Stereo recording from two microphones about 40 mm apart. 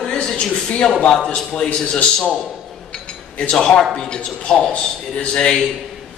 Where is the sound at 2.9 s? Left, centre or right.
Left.